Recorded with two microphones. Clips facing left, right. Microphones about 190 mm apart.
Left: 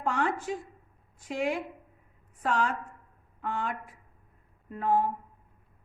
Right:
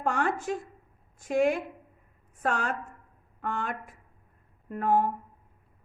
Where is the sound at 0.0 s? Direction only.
50° right (ahead or behind).